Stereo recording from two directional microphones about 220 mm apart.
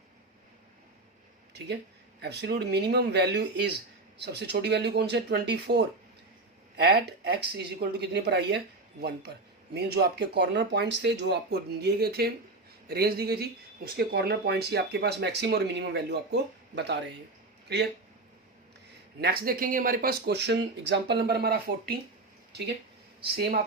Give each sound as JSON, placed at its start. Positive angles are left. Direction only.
{"t": 1.5, "sound": "speech", "side_deg": -50}
{"t": 19.2, "sound": "speech", "side_deg": -45}